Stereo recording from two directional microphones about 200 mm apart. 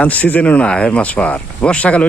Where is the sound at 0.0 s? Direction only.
5° left (ahead or behind).